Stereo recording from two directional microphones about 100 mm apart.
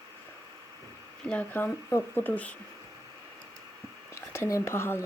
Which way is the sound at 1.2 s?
10° left (ahead or behind).